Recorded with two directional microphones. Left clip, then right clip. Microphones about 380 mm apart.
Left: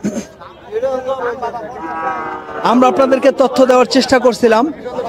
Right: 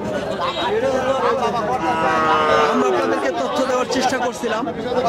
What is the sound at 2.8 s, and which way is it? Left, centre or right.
Speech, left.